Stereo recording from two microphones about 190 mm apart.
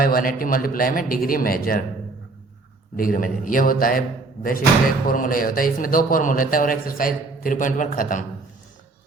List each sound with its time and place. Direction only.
0.0 s a man's voice: 50° left (ahead or behind)
2.9 s a man's voice: 45° left (ahead or behind)
5.0 s a man's voice: 45° left (ahead or behind)